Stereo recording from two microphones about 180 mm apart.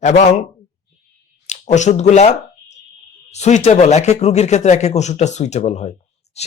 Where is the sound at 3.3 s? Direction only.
40° left (ahead or behind).